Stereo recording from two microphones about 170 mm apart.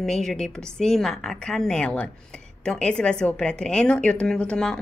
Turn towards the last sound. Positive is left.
turn(degrees=5)  # may be behind; listen again after turning